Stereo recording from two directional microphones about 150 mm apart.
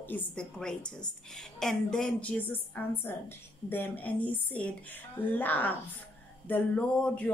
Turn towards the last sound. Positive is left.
turn(degrees=10)  # may be behind; listen again after turning